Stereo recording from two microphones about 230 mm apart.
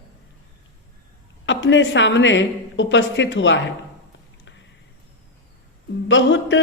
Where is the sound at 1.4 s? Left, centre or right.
Left.